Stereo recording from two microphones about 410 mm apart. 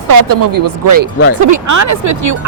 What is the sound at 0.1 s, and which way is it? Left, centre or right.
Speech, right.